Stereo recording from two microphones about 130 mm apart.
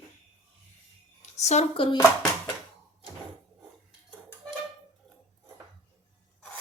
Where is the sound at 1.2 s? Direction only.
60° left (ahead or behind).